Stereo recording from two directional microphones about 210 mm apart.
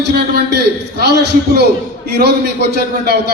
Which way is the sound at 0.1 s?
50° right (ahead or behind).